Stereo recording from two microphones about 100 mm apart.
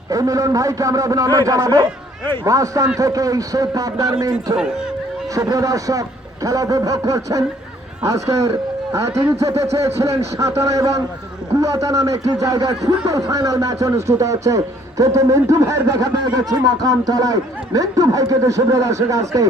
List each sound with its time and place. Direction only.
0.1 s speech: 35° right (ahead or behind)